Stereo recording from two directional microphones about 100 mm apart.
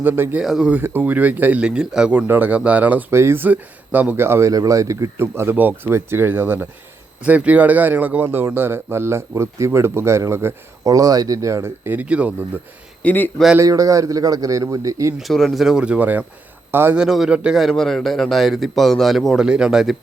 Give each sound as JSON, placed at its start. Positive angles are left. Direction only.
{"t": 0.0, "sound": "speech", "side_deg": -20}
{"t": 0.4, "sound": "a man's voice", "side_deg": -5}
{"t": 0.7, "sound": "speech", "side_deg": -20}
{"t": 3.1, "sound": "speech", "side_deg": -25}
{"t": 11.9, "sound": "speech", "side_deg": -15}
{"t": 13.0, "sound": "a man's voice", "side_deg": 15}
{"t": 13.6, "sound": "a man's voice", "side_deg": -35}
{"t": 15.2, "sound": "a man's voice", "side_deg": 5}
{"t": 16.9, "sound": "a man's voice", "side_deg": -5}